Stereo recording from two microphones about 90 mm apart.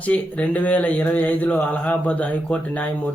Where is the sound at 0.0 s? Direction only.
15° left (ahead or behind).